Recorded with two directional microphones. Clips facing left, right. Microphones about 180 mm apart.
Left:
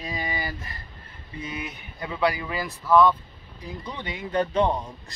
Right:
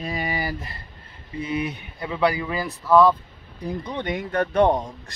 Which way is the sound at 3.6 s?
60° right (ahead or behind).